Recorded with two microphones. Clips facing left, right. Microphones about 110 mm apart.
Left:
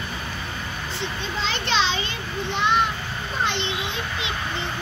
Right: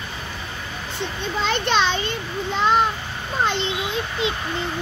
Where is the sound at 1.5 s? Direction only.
50° right (ahead or behind).